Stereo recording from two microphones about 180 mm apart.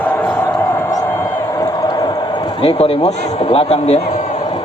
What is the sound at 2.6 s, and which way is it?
Speech, 30° left (ahead or behind).